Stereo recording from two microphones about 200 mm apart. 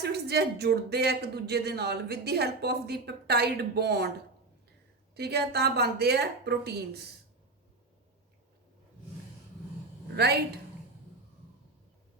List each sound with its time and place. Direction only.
0.0 s speech: 55° right (ahead or behind)
5.1 s speech: 55° right (ahead or behind)
10.2 s a woman's voice: 55° right (ahead or behind)